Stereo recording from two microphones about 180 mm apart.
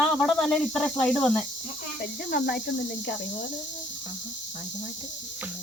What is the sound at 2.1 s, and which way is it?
Speech, 65° left (ahead or behind).